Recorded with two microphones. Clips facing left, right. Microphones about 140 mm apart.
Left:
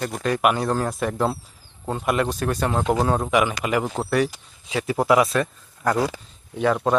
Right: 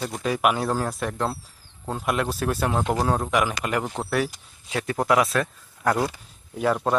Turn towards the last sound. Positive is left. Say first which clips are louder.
# left 2 dB
turn(degrees=0)  # may be behind; listen again after turning